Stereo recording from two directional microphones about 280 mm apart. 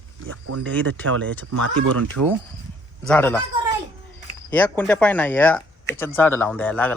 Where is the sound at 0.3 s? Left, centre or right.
Right.